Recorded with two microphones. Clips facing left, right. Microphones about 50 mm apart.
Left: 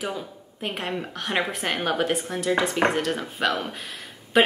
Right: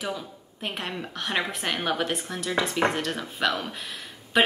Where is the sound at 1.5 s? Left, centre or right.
Left.